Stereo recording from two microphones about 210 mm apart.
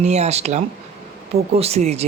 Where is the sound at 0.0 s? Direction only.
30° right (ahead or behind).